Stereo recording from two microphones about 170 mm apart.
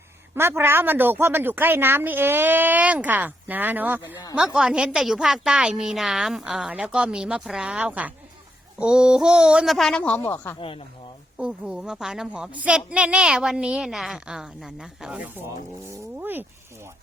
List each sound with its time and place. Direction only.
0.3 s a woman's voice: 15° right (ahead or behind); by 10.6 s 15° left (ahead or behind)
10.6 s speech: 30° left (ahead or behind)
11.3 s a woman's voice: 5° right (ahead or behind)